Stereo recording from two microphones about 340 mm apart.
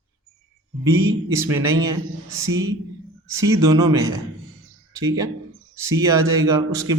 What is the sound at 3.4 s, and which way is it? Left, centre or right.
Speech, centre.